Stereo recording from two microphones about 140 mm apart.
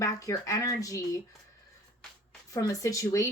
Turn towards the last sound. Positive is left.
turn(degrees=25)  # may be behind; listen again after turning